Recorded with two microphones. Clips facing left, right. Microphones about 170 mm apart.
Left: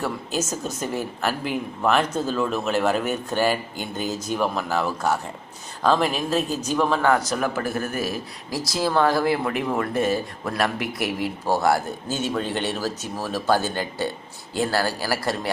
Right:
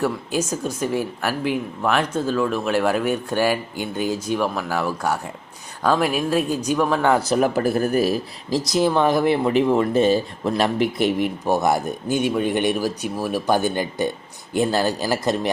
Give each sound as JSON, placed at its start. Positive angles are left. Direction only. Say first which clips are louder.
{"t": 0.0, "sound": "speech", "louder": "right 4 dB", "side_deg": -10}
{"t": 7.2, "sound": "speech", "louder": "right 6 dB", "side_deg": -35}
{"t": 8.4, "sound": "speech", "louder": "right 6 dB", "side_deg": -20}